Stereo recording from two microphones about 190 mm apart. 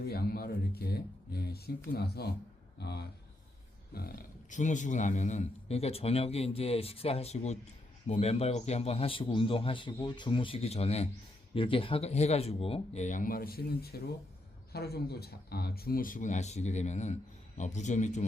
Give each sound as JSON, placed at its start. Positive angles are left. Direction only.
{"t": 0.0, "sound": "a man's voice", "side_deg": 55}